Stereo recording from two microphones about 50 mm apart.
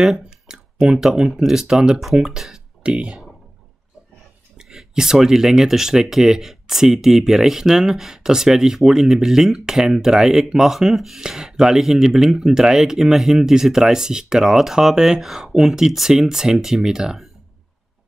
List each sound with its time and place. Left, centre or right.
0.5 s a sound: centre
0.9 s speech: centre
2.8 s speech: right
4.6 s speech: centre